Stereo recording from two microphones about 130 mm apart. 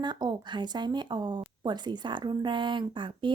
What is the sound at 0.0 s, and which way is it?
Speech, 35° right (ahead or behind).